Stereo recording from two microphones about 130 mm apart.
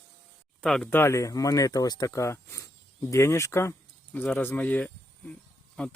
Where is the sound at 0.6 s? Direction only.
5° left (ahead or behind).